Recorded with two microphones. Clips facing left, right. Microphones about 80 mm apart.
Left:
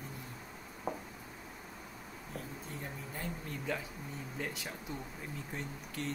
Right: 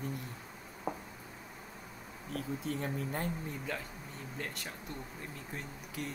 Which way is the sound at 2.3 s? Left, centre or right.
Right.